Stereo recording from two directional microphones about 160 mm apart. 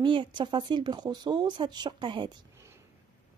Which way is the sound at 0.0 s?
30° right (ahead or behind).